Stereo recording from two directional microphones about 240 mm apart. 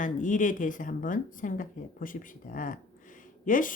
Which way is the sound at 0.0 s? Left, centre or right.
Left.